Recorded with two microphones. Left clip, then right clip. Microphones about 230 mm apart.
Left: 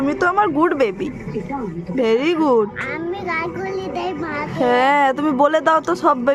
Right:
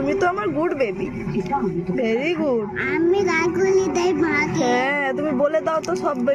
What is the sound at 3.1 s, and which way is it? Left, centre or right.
A child's voice, centre.